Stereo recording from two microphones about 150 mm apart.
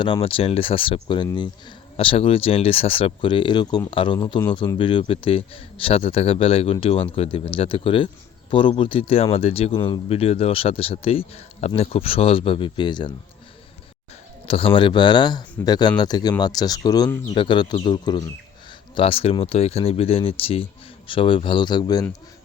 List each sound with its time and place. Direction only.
0.0 s a man's voice: 35° left (ahead or behind)
14.4 s a man's voice: 40° left (ahead or behind)